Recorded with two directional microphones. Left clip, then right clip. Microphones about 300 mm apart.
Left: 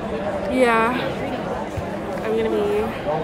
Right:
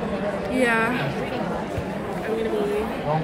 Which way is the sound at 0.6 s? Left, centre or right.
Centre.